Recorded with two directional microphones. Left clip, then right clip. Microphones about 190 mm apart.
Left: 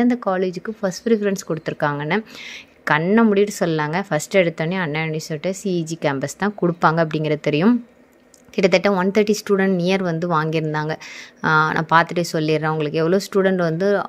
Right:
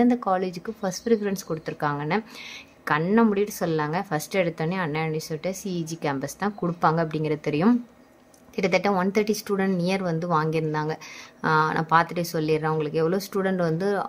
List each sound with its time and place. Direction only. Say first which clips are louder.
0.0 s a woman's voice: left 3 dB; 15° left (ahead or behind)